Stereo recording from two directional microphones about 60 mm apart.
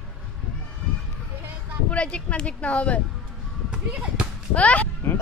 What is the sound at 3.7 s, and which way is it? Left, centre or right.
Speech, centre.